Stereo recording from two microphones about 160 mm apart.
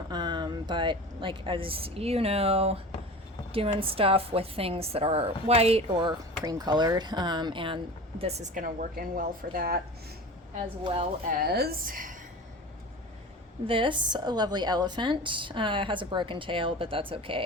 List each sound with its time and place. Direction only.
0.1 s a woman's voice: 25° right (ahead or behind)
8.2 s speech: 45° right (ahead or behind)
8.6 s a woman's voice: 60° right (ahead or behind)
10.8 s a woman's voice: 35° right (ahead or behind)
11.3 s a woman's voice: 80° right; by 12.1 s 60° right (ahead or behind)
13.7 s a woman's voice: 30° right (ahead or behind)